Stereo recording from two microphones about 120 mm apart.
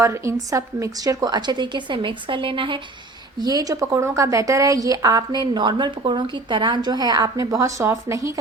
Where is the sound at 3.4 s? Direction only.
30° right (ahead or behind).